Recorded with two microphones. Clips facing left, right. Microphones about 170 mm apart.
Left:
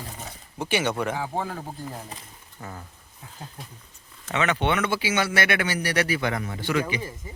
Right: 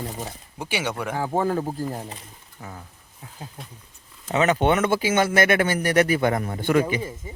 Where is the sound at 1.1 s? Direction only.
45° right (ahead or behind).